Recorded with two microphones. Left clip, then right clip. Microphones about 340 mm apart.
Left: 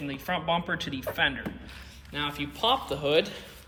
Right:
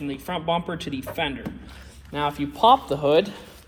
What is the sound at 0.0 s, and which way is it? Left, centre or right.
Speech, centre.